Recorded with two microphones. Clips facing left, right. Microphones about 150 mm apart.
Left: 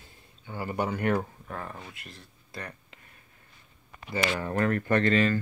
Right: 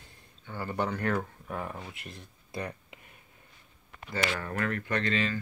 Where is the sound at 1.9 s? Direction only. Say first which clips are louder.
Right 2 dB; 20° right (ahead or behind).